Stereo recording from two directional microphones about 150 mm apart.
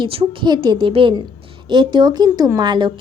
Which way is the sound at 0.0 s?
35° right (ahead or behind).